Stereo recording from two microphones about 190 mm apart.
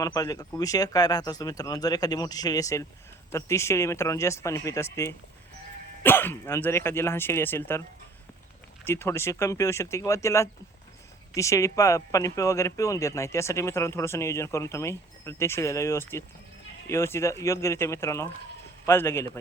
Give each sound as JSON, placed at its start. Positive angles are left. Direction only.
{"t": 0.0, "sound": "speech", "side_deg": 20}
{"t": 8.8, "sound": "speech", "side_deg": 15}